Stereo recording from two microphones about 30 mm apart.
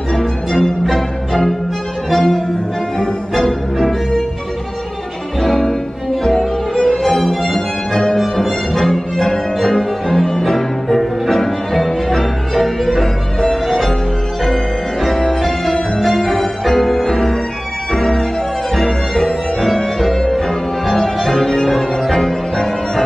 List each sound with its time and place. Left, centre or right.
0.5 s music: centre
2.1 s accordion: centre
3.3 s music: centre
6.2 s music: centre
9.7 s cello: centre
10.4 s music: centre